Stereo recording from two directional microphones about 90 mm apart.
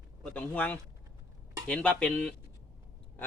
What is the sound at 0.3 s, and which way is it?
Speech, 20° left (ahead or behind).